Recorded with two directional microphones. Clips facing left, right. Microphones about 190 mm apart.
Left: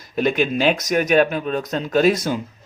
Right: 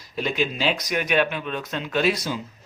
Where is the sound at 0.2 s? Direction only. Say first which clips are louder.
Left 6 dB; 55° left (ahead or behind).